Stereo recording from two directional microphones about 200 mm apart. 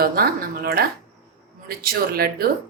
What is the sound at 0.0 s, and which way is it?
Speech, 45° right (ahead or behind).